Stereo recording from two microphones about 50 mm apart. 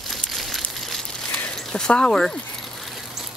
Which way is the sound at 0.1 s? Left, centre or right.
Centre.